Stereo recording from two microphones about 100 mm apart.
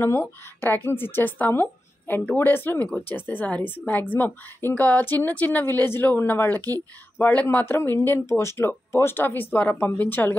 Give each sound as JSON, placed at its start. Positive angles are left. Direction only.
{"t": 0.0, "sound": "speech", "side_deg": 25}